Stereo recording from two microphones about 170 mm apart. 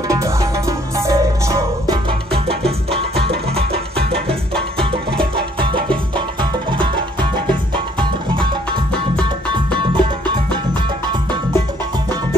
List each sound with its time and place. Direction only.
0.1 s music: 20° right (ahead or behind)
9.8 s music: 30° right (ahead or behind)